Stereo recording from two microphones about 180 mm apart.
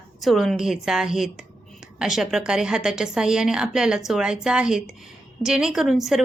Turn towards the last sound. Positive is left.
turn(degrees=0)  # may be behind; listen again after turning